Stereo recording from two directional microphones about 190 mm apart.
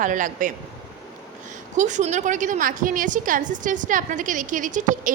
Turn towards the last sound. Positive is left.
turn(degrees=-40)  # may be behind; listen again after turning